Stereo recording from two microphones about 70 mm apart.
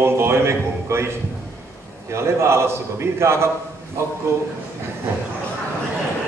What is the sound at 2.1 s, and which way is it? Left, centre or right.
A man's voice, right.